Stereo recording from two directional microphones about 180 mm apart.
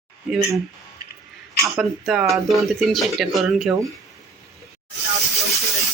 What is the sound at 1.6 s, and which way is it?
Speech, centre (ahead or behind).